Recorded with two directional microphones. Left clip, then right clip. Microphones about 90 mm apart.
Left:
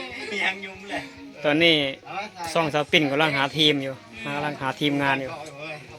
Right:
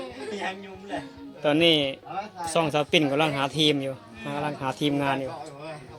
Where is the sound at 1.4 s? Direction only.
10° right (ahead or behind).